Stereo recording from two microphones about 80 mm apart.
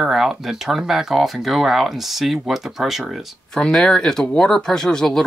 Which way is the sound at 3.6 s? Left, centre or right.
Centre.